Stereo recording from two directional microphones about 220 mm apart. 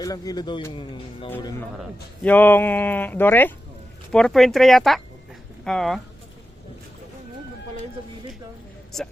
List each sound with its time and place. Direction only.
0.0 s speech: 15° left (ahead or behind)